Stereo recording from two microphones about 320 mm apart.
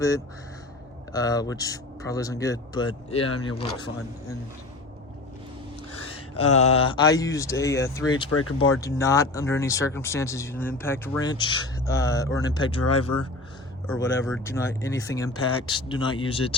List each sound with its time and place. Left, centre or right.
1.1 s speech: centre
6.5 s speech: centre
8.3 s speech: left
8.8 s speech: centre
13.0 s speech: left
14.0 s speech: centre